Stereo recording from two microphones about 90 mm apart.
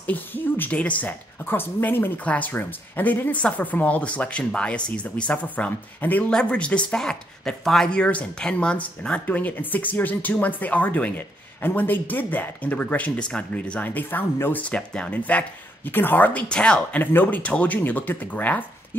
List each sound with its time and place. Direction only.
0.0 s speech: 20° left (ahead or behind)